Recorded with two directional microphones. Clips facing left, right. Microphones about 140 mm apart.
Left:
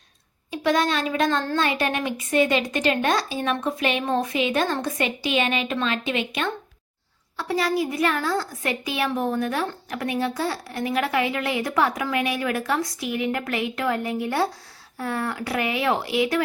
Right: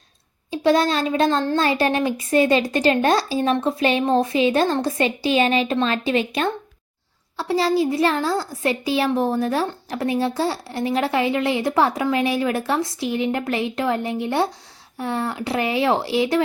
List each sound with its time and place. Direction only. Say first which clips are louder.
0.5 s a woman's voice: right 4 dB; 30° right (ahead or behind)